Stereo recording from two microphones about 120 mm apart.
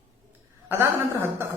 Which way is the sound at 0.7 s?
20° right (ahead or behind).